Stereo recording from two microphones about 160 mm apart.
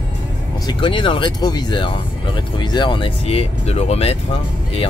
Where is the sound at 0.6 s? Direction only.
30° left (ahead or behind).